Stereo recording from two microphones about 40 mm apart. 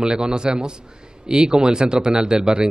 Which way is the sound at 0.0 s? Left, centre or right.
Centre.